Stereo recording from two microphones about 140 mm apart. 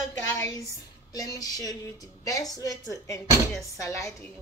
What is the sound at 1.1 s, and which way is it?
A woman's voice, 25° left (ahead or behind).